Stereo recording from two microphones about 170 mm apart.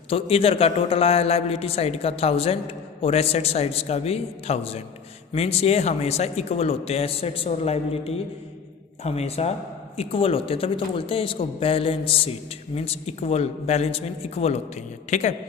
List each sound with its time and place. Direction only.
0.1 s a man's voice: 35° left (ahead or behind)